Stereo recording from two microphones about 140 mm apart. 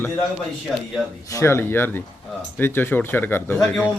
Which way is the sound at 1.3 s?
20° left (ahead or behind).